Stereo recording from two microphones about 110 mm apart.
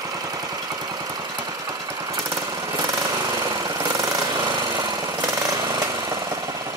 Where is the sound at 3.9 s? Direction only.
30° right (ahead or behind).